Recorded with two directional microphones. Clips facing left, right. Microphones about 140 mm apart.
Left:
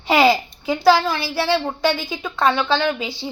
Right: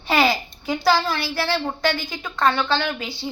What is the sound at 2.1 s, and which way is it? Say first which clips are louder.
Speech: left 2 dB; 5° left (ahead or behind).